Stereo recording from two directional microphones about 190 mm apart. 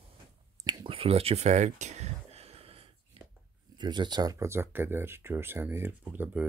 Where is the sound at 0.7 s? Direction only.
25° right (ahead or behind).